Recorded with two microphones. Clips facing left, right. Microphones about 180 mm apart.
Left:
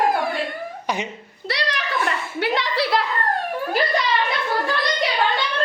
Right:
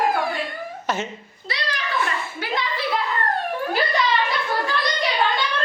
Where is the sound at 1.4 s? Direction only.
70° left (ahead or behind).